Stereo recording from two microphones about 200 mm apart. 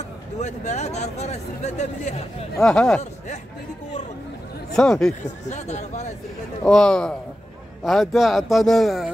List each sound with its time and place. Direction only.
0.4 s speech: 35° left (ahead or behind)
2.5 s speech: 5° left (ahead or behind)
4.7 s speech: 5° left (ahead or behind)
5.5 s speech: 35° left (ahead or behind)
6.6 s speech: 5° left (ahead or behind)